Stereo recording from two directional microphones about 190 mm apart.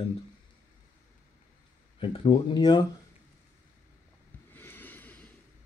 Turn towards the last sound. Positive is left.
turn(degrees=10)  # may be behind; listen again after turning